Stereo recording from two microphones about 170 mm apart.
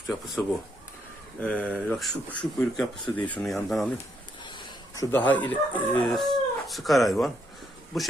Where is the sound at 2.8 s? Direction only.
5° left (ahead or behind).